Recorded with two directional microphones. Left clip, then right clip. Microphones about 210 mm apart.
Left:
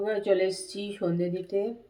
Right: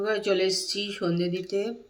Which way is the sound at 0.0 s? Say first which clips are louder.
Right 1 dB; 10° right (ahead or behind).